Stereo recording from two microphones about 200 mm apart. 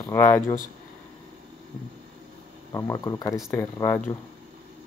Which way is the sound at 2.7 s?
15° left (ahead or behind).